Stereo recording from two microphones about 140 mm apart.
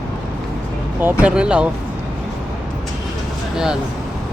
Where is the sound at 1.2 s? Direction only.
5° right (ahead or behind).